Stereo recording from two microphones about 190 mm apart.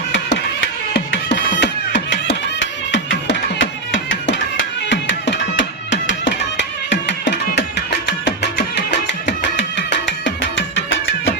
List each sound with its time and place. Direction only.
0.9 s music: 70° left (ahead or behind); by 11.3 s 85° left